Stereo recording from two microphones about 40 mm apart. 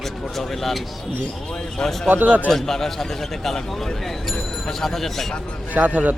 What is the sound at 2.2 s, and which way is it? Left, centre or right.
Speech, right.